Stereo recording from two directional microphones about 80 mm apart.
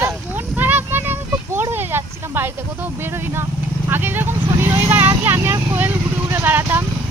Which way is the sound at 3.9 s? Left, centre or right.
Right.